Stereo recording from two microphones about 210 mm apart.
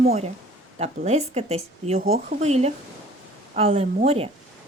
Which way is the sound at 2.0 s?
45° right (ahead or behind).